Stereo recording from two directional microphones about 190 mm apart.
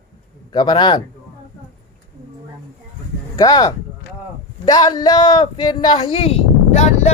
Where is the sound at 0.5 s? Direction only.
25° left (ahead or behind).